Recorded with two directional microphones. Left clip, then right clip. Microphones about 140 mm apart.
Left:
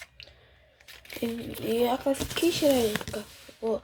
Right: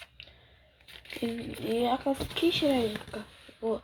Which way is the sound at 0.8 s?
5° left (ahead or behind).